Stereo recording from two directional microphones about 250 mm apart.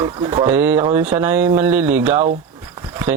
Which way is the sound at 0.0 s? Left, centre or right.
Centre.